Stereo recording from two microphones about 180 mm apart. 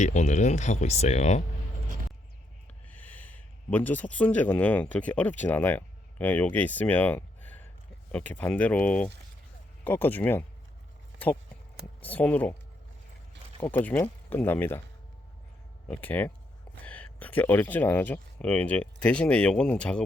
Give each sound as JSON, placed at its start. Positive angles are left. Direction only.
{"t": 0.0, "sound": "speech", "side_deg": 40}
{"t": 2.9, "sound": "speech", "side_deg": 10}
{"t": 11.9, "sound": "speech", "side_deg": 10}
{"t": 13.6, "sound": "speech", "side_deg": 10}
{"t": 15.9, "sound": "speech", "side_deg": 10}